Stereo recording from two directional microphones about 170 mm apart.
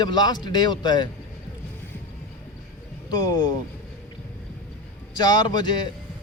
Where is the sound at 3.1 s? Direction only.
20° left (ahead or behind).